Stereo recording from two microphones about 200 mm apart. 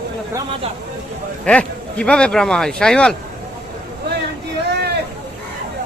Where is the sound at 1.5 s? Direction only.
5° left (ahead or behind).